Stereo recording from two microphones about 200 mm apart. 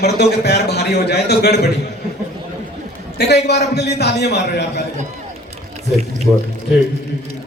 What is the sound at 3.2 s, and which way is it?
A man's voice, 55° left (ahead or behind).